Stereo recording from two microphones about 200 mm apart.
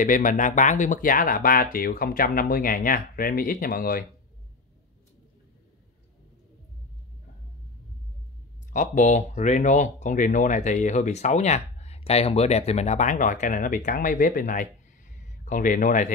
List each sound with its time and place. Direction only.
0.0 s speech: 40° left (ahead or behind)
8.7 s speech: 40° left (ahead or behind)